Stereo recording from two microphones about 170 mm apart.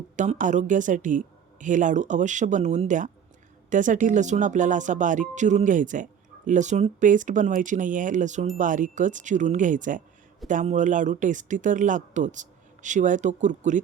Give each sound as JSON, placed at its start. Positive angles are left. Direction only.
{"t": 0.2, "sound": "speech", "side_deg": -45}